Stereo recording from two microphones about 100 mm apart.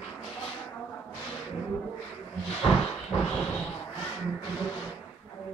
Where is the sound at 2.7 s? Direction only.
15° left (ahead or behind).